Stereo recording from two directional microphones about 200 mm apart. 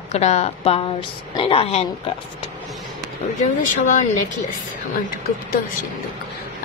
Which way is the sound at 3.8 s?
40° left (ahead or behind).